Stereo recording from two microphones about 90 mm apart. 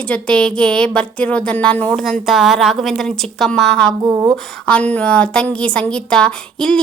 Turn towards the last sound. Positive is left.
turn(degrees=5)  # may be behind; listen again after turning